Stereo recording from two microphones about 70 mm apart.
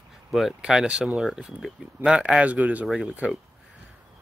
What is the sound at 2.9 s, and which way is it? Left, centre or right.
Speech, centre.